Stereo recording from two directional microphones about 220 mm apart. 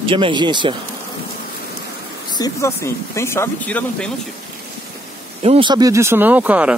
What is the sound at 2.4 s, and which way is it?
Speech, 15° left (ahead or behind).